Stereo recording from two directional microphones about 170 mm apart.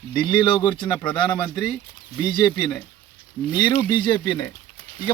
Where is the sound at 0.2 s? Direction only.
25° left (ahead or behind).